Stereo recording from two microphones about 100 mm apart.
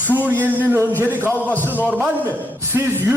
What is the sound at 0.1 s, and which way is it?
A man's voice, 20° right (ahead or behind).